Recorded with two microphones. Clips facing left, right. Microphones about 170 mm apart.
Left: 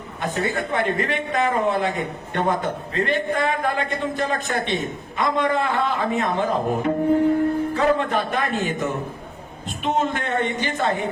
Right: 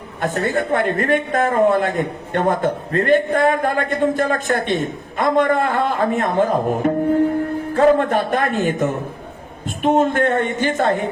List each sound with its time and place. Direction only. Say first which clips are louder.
0.2 s speech: right 5 dB; 50° right (ahead or behind)